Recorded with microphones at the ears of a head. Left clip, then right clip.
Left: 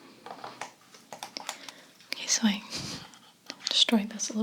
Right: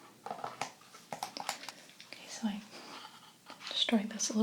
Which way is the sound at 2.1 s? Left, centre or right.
Left.